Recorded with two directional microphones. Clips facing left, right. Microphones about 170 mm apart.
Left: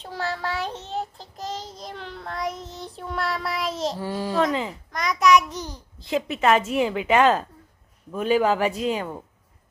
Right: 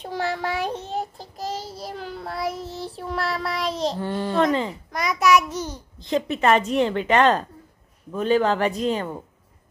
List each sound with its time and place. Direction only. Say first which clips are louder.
0.0 s child singing: right 3 dB; 15° right (ahead or behind); by 4.7 s 5° left (ahead or behind)
4.9 s child singing: even; 5° right (ahead or behind)
8.1 s speech: right 1 dB; 10° left (ahead or behind)